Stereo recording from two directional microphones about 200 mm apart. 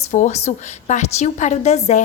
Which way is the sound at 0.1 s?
35° left (ahead or behind).